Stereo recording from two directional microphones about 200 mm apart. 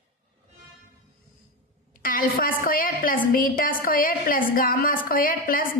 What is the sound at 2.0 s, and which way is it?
A woman's voice, 45° left (ahead or behind).